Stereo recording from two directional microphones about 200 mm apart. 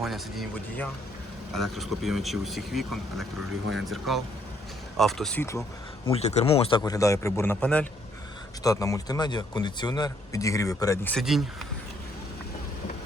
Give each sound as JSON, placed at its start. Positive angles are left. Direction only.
{"t": 0.0, "sound": "speech", "side_deg": 0}
{"t": 6.1, "sound": "a man's voice", "side_deg": 30}
{"t": 11.1, "sound": "speech", "side_deg": 0}